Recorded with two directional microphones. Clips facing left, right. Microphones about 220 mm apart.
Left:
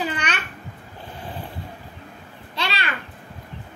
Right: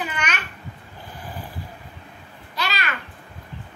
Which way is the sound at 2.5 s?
30° left (ahead or behind).